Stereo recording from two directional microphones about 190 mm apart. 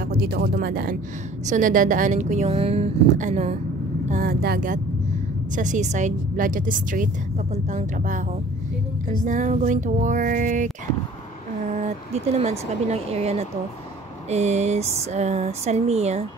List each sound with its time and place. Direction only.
0.0 s speech: 50° right (ahead or behind)
1.4 s a woman's voice: 40° right (ahead or behind)
4.1 s a sound: 50° right (ahead or behind)
5.5 s a woman's voice: 40° right (ahead or behind)
9.2 s a sound: 40° right (ahead or behind)
11.7 s a woman's voice: 35° right (ahead or behind)